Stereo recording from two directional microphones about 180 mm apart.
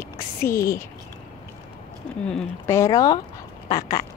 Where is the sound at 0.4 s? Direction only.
15° left (ahead or behind).